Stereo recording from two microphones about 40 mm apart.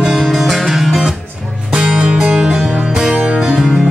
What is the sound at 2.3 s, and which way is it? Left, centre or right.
Music, centre.